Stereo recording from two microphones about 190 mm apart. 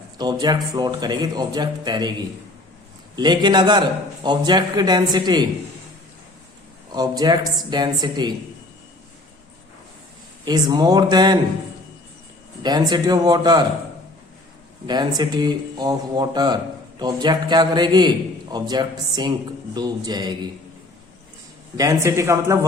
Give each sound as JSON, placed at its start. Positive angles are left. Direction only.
{"t": 0.2, "sound": "speech", "side_deg": -20}
{"t": 6.9, "sound": "speech", "side_deg": -20}
{"t": 10.4, "sound": "speech", "side_deg": -20}
{"t": 12.6, "sound": "speech", "side_deg": -20}
{"t": 14.8, "sound": "speech", "side_deg": -20}
{"t": 21.8, "sound": "a man's voice", "side_deg": -15}